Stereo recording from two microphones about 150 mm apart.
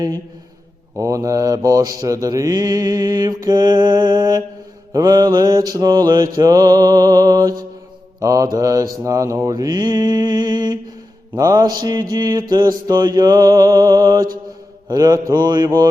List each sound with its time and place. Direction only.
0.9 s mantra: 20° right (ahead or behind)